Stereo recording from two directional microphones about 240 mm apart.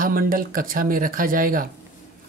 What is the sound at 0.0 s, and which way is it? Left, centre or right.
Speech, right.